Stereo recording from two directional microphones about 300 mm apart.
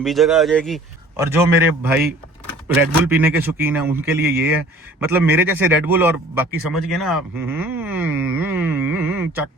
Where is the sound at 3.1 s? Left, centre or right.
Centre.